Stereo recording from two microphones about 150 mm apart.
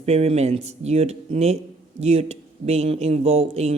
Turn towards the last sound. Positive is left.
turn(degrees=-45)  # may be behind; listen again after turning